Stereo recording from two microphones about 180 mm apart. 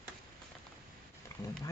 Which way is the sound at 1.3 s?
20° left (ahead or behind).